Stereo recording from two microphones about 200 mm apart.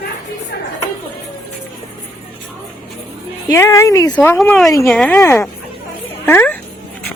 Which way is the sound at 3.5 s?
15° left (ahead or behind).